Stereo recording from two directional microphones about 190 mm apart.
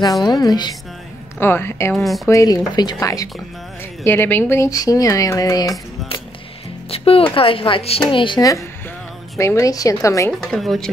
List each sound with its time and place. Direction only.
0.0 s speech: 20° left (ahead or behind)
2.0 s speech: centre (ahead or behind)
2.2 s speech: 20° left (ahead or behind)
6.9 s speech: 30° left (ahead or behind)
10.4 s speech: centre (ahead or behind)